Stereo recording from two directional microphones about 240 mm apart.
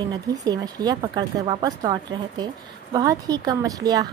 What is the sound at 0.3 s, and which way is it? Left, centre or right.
Speech, centre.